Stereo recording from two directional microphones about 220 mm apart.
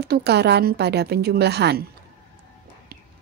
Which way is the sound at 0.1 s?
50° right (ahead or behind).